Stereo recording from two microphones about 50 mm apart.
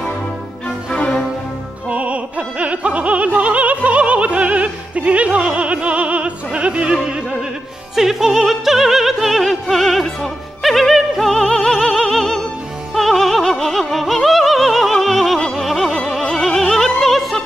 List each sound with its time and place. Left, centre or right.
1.9 s music: right
7.9 s opera: centre
12.9 s music: centre